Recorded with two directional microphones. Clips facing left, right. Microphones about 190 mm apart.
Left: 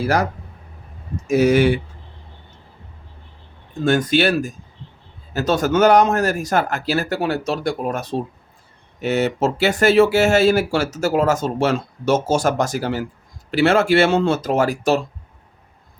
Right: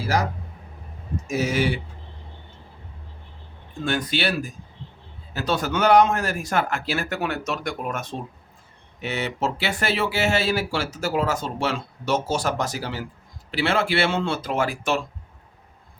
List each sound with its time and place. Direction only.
1.3 s speech: 55° left (ahead or behind)
3.8 s speech: 45° left (ahead or behind)